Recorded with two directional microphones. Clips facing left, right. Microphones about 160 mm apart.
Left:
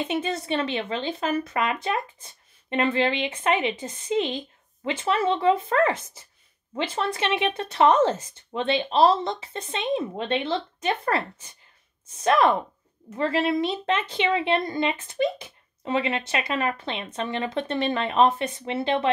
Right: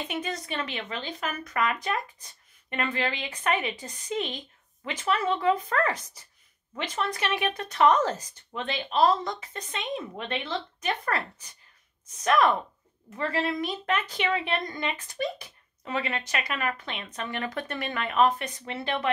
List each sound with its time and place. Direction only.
0.1 s a woman's voice: 30° left (ahead or behind)